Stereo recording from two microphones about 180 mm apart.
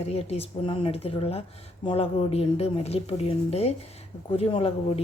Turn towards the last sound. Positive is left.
turn(degrees=30)  # may be behind; listen again after turning